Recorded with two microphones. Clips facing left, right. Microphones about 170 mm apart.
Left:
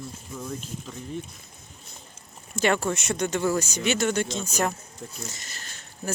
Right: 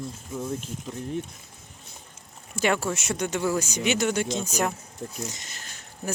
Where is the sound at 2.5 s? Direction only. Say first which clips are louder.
Left 1 dB; 10° right (ahead or behind).